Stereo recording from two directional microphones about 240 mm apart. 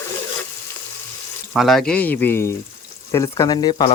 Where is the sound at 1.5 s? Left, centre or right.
Centre.